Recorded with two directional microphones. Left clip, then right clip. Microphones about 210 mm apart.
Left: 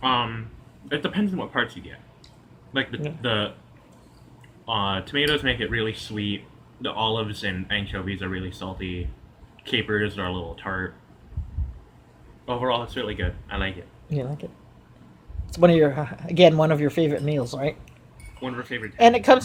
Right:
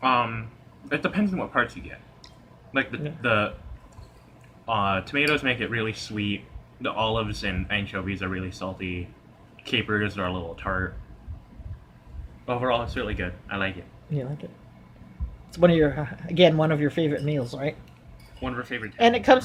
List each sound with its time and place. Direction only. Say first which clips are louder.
0.0 s speech: right 1 dB; centre (ahead or behind)
3.2 s speech: right 3 dB; centre (ahead or behind)
4.6 s speech: right 1 dB; centre (ahead or behind)
12.5 s speech: even; centre (ahead or behind)
14.1 s speech: left 3 dB; 15° left (ahead or behind)
15.5 s speech: left 2 dB; 15° left (ahead or behind)
18.4 s speech: even; centre (ahead or behind)
18.9 s speech: left 3 dB; 15° left (ahead or behind)